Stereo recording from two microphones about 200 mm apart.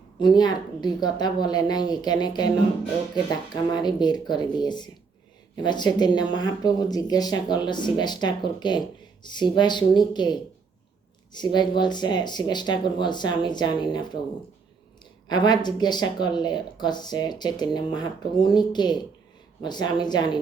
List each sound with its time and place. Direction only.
0.2 s speech: 20° left (ahead or behind)
15.3 s speech: 20° left (ahead or behind)